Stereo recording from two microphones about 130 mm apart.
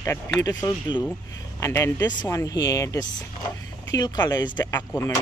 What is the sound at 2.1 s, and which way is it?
Speech, 35° left (ahead or behind).